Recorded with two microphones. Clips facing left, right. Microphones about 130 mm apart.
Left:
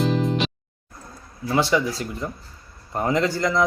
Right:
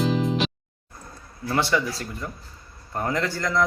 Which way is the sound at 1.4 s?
15° left (ahead or behind).